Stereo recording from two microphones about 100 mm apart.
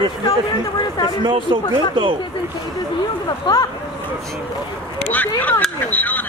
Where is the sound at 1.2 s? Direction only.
55° right (ahead or behind).